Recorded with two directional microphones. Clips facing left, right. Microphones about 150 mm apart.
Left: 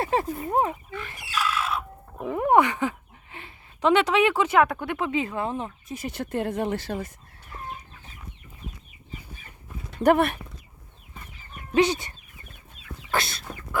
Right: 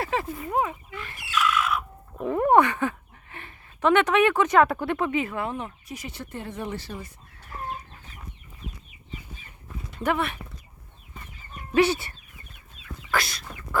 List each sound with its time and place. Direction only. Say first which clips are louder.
0.0 s a sound: left 3 dB; 30° left (ahead or behind)
0.3 s speech: left 2 dB; 35° left (ahead or behind)
1.3 s chicken: right 2 dB; 35° left (ahead or behind)
2.2 s speech: right 1 dB; 5° left (ahead or behind)
4.6 s speech: right 2 dB; 5° right (ahead or behind)
5.1 s speech: left 1 dB; 20° left (ahead or behind)
6.1 s speech: left 10 dB; 55° left (ahead or behind)
10.0 s speech: left 7 dB; 45° left (ahead or behind)
11.7 s speech: even; 15° left (ahead or behind)
13.1 s chicken: even; 25° left (ahead or behind)